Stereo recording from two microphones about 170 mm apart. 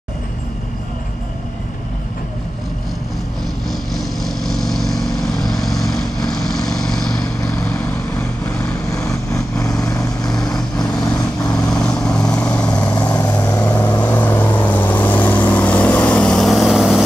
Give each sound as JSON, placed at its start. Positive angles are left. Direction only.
{"t": 3.9, "sound": "vehicle", "side_deg": 0}
{"t": 9.8, "sound": "vehicle", "side_deg": 20}
{"t": 10.5, "sound": "vehicle", "side_deg": 0}